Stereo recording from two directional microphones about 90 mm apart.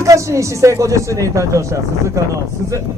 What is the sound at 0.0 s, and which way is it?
Speech, 35° right (ahead or behind).